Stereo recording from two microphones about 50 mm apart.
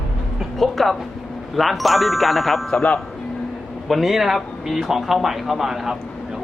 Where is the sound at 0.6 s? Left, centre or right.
Centre.